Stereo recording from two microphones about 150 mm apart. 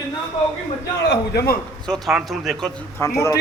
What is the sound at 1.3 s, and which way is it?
Speech, 90° left.